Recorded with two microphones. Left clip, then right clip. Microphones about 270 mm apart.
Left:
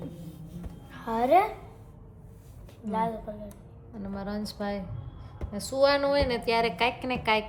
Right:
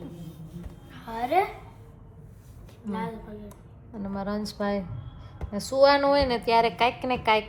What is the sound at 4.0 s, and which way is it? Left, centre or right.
A woman's voice, centre.